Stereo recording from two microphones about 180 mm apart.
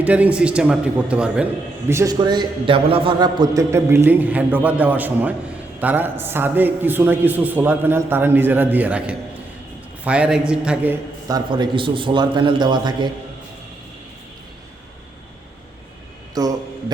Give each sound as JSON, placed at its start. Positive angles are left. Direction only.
{"t": 0.0, "sound": "a man's voice", "side_deg": -10}
{"t": 1.9, "sound": "a man's voice", "side_deg": -20}
{"t": 11.3, "sound": "a man's voice", "side_deg": -25}
{"t": 16.3, "sound": "a sound", "side_deg": -20}